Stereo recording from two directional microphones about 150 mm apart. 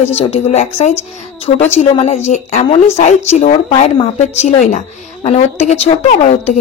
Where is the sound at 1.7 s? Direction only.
45° left (ahead or behind).